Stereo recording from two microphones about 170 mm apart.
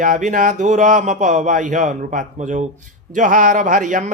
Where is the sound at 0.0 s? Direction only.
50° right (ahead or behind).